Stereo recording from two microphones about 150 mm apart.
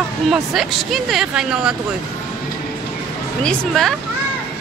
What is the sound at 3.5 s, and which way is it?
Speech, centre (ahead or behind).